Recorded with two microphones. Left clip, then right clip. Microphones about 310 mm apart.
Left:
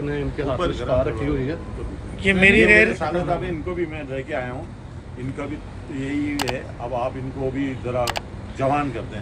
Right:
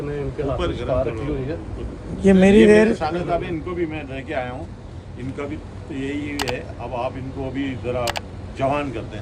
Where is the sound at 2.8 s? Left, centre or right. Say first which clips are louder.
Even; centre.